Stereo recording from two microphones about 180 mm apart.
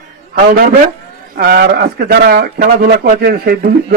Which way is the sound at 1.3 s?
60° right (ahead or behind).